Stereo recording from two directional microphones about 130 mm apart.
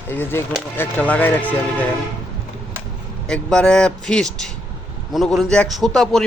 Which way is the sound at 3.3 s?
5° left (ahead or behind).